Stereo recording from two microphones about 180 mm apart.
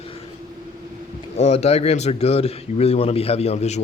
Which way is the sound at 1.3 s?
35° left (ahead or behind).